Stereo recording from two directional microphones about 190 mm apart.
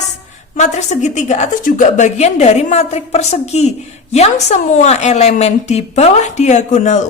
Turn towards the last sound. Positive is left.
turn(degrees=40)  # may be behind; listen again after turning